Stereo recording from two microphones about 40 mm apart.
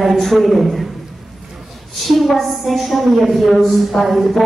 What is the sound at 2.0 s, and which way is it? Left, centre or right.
A woman's voice, centre.